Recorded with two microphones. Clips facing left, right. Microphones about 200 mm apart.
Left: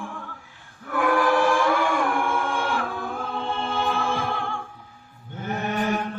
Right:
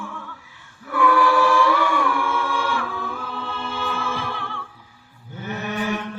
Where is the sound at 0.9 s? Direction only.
50° left (ahead or behind).